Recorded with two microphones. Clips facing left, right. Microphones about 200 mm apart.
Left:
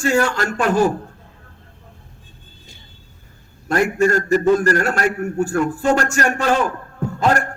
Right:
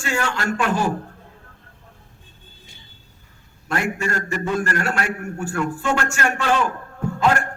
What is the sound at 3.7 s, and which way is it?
A man's voice, 40° left (ahead or behind).